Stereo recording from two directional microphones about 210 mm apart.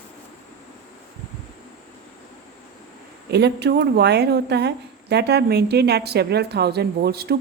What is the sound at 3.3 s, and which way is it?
A woman's voice, 50° right (ahead or behind).